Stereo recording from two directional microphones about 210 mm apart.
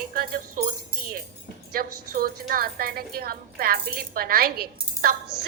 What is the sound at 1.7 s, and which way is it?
A woman's voice, 45° right (ahead or behind).